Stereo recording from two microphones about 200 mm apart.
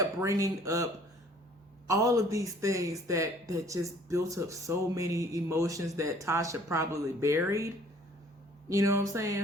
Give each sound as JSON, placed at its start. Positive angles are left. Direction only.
{"t": 0.0, "sound": "a man's voice", "side_deg": -15}
{"t": 1.9, "sound": "a man's voice", "side_deg": -15}
{"t": 8.7, "sound": "a man's voice", "side_deg": -15}